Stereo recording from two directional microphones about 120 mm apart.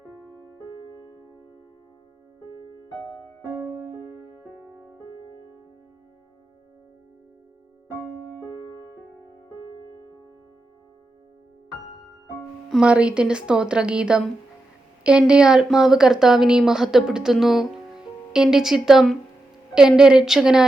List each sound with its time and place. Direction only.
3.5 s music: 15° right (ahead or behind)
12.7 s a woman's voice: 10° right (ahead or behind)